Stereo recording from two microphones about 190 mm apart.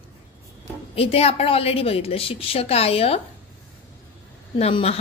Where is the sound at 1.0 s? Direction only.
30° left (ahead or behind).